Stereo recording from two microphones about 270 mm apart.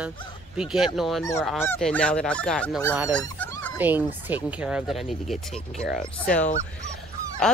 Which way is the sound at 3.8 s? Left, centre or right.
Centre.